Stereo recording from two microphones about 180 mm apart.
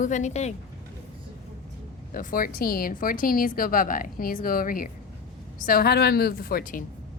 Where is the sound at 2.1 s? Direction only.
50° left (ahead or behind).